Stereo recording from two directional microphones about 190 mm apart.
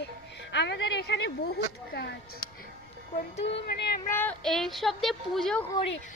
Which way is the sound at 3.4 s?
65° left (ahead or behind).